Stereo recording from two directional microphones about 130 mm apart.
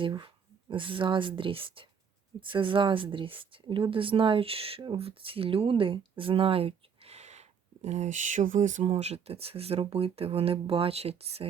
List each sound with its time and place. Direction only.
0.0 s speech: 35° right (ahead or behind); by 11.4 s 50° right (ahead or behind)